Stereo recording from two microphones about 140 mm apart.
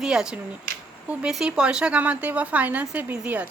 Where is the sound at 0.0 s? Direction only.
5° right (ahead or behind).